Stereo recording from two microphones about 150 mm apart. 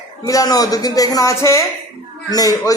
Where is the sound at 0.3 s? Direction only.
25° left (ahead or behind).